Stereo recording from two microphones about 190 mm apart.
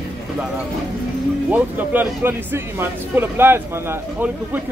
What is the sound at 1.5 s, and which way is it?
Speech, 10° right (ahead or behind).